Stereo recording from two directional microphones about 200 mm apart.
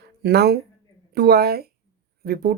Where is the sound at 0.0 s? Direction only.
55° right (ahead or behind).